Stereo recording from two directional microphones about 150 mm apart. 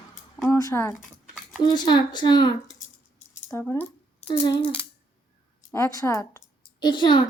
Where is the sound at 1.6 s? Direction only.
30° left (ahead or behind).